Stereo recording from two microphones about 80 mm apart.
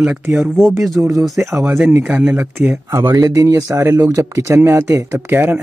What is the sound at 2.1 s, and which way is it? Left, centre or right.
Speech, centre.